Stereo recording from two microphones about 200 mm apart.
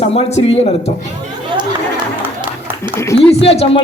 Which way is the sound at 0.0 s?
30° left (ahead or behind).